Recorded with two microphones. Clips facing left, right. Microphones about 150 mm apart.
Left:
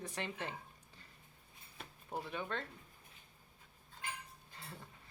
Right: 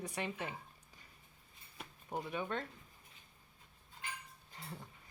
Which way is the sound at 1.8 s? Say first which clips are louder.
Right 2 dB; 10° right (ahead or behind).